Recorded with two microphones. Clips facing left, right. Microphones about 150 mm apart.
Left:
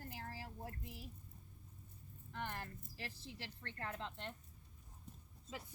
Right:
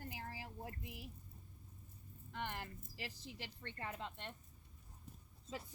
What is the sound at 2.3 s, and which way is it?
Speech, 15° right (ahead or behind).